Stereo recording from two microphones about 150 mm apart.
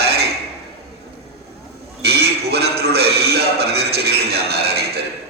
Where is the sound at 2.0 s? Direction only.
90° right.